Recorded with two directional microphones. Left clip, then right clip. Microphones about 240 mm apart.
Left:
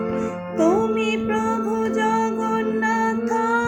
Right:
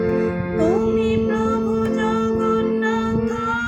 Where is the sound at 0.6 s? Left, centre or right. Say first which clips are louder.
Even; left.